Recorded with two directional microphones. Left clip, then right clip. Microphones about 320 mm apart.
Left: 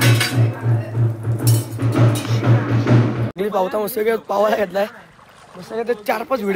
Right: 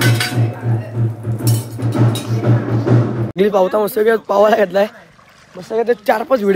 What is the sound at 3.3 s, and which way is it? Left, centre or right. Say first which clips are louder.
Speech: right 7 dB; right.